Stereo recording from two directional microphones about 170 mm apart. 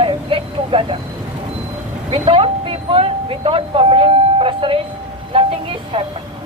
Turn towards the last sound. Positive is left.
turn(degrees=-30)  # may be behind; listen again after turning